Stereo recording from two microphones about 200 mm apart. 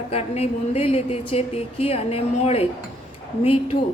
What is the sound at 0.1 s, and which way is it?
A woman's voice, 30° left (ahead or behind).